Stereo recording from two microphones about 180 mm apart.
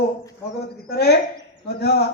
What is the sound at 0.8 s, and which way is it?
A man's voice, 60° left (ahead or behind).